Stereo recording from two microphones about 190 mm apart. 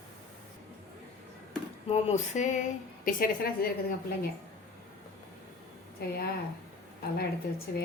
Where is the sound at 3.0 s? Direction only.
50° left (ahead or behind).